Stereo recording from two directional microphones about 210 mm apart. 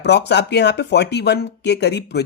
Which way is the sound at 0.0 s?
55° left (ahead or behind).